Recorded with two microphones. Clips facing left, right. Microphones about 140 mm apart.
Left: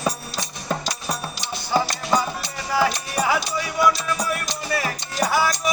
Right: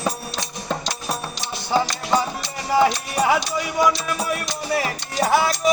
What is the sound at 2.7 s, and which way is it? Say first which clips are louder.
Music: right 4 dB; 20° right (ahead or behind).